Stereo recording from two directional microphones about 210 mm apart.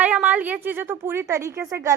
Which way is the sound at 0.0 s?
5° right (ahead or behind).